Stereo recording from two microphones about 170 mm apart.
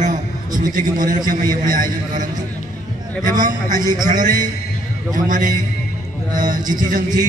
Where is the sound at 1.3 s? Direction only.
50° right (ahead or behind).